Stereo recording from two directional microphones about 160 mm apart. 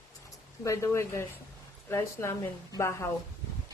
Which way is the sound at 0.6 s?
20° left (ahead or behind).